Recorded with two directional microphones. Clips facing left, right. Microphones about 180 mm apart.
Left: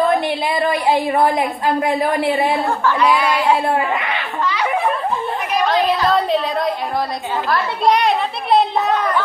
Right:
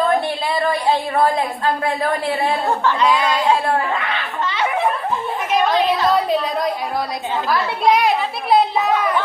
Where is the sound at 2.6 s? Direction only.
20° right (ahead or behind).